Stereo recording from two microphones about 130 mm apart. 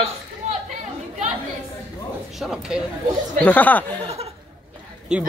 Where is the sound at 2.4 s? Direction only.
5° right (ahead or behind).